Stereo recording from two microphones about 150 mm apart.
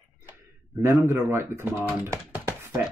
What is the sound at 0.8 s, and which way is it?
Speech, 15° right (ahead or behind).